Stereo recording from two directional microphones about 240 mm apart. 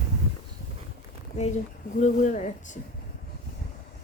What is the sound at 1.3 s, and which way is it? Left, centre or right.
Speech, left.